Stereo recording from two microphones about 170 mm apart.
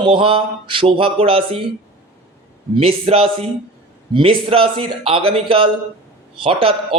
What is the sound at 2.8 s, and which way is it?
Speech, 35° right (ahead or behind).